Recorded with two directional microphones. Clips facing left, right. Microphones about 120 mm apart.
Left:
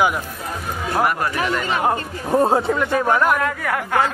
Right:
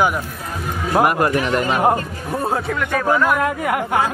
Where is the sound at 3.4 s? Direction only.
20° right (ahead or behind).